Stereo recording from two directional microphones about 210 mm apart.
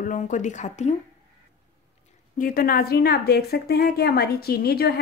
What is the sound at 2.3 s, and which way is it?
A woman's voice, 45° left (ahead or behind).